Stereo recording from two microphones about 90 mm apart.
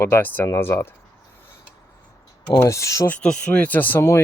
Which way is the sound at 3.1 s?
10° left (ahead or behind).